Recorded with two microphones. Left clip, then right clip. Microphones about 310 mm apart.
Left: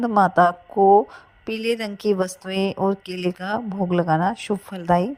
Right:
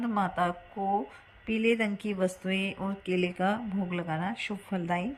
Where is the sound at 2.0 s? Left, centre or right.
Left.